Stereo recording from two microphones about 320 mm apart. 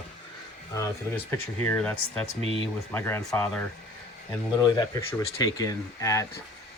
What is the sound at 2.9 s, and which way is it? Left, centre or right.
Speech, centre.